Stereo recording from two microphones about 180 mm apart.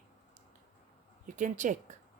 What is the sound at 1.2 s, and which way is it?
Speech, 45° right (ahead or behind).